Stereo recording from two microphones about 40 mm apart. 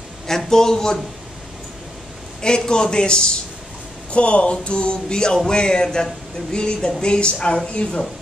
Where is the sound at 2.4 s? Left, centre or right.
Centre.